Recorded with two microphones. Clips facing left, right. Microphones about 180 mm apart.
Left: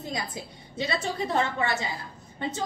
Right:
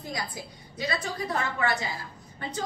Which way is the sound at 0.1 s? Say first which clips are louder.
Even; 25° left (ahead or behind).